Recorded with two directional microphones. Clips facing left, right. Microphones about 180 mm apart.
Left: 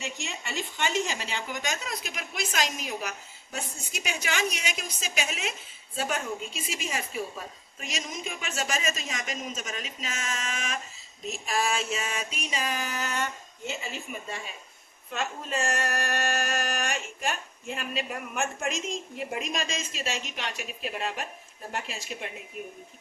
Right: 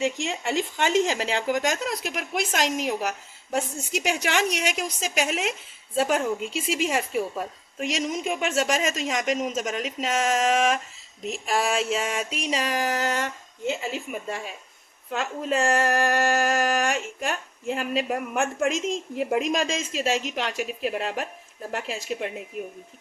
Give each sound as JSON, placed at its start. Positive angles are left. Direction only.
{"t": 0.0, "sound": "speech", "side_deg": -90}
{"t": 15.1, "sound": "speech", "side_deg": -90}